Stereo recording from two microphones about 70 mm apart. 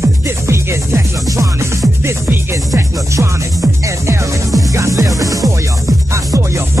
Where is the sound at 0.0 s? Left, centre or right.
Right.